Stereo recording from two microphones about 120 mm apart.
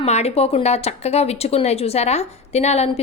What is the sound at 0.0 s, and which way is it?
Speech, 60° left (ahead or behind).